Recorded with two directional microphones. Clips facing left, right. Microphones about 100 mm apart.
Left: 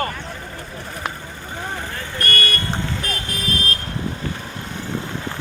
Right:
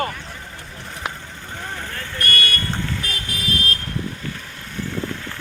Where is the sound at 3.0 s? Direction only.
35° left (ahead or behind).